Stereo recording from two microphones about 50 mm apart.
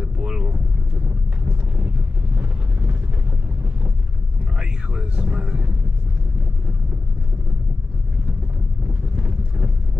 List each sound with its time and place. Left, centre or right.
0.0 s boat: centre
2.3 s vehicle: right
5.1 s a sound: right
9.1 s boat: right